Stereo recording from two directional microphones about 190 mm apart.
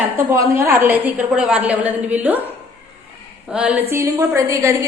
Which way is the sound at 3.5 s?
5° right (ahead or behind).